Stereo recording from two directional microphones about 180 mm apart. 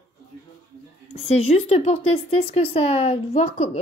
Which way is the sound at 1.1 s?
35° left (ahead or behind).